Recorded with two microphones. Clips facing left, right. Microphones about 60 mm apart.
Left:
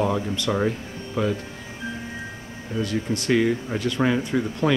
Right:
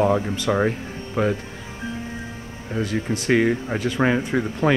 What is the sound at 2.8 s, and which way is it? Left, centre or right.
Speech, right.